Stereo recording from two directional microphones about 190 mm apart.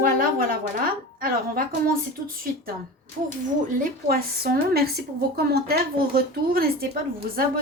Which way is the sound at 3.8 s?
50° right (ahead or behind).